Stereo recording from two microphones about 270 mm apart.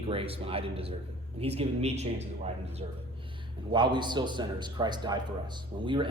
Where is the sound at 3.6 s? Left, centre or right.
Centre.